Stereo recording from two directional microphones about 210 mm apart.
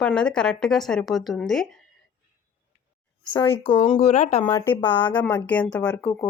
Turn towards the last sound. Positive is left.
turn(degrees=5)  # may be behind; listen again after turning